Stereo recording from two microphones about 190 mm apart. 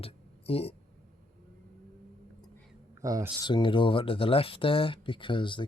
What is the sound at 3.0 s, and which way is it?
Speech, 20° right (ahead or behind).